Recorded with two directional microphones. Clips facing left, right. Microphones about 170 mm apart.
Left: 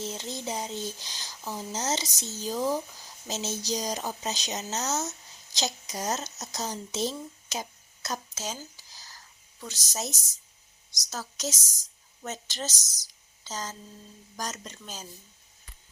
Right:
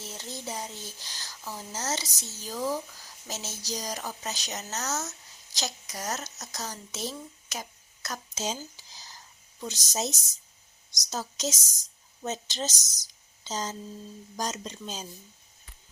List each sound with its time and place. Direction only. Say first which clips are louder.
0.0 s speech: left 5 dB; 20° left (ahead or behind)
8.4 s speech: right 4 dB; 20° right (ahead or behind)